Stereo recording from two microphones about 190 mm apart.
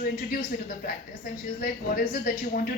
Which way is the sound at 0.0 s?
50° left (ahead or behind).